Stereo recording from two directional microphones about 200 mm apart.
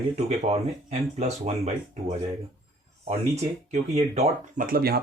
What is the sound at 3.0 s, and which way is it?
Speech, 35° right (ahead or behind).